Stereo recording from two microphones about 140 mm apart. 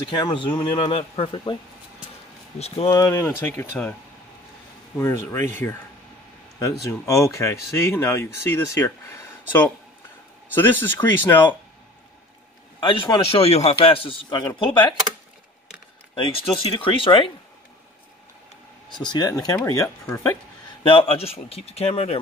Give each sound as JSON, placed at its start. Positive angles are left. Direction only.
{"t": 0.1, "sound": "a man's voice", "side_deg": 35}
{"t": 2.6, "sound": "speech", "side_deg": 45}
{"t": 2.9, "sound": "speech", "side_deg": 20}
{"t": 4.9, "sound": "speech", "side_deg": 20}
{"t": 12.8, "sound": "a man's voice", "side_deg": 40}
{"t": 16.2, "sound": "a man's voice", "side_deg": 40}
{"t": 18.9, "sound": "a man's voice", "side_deg": 30}
{"t": 20.8, "sound": "speech", "side_deg": 40}